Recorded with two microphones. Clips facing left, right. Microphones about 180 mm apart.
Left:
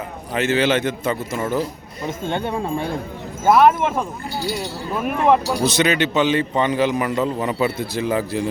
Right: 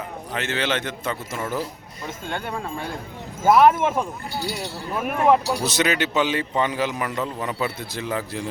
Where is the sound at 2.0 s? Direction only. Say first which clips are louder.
Left 6 dB; 20° left (ahead or behind).